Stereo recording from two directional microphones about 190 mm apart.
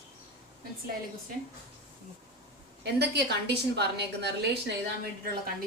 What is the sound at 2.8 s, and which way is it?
A woman's voice, 60° right (ahead or behind).